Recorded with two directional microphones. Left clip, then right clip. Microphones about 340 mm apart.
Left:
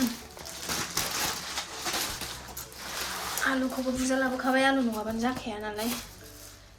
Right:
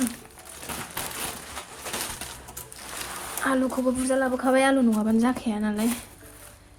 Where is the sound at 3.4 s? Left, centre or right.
Centre.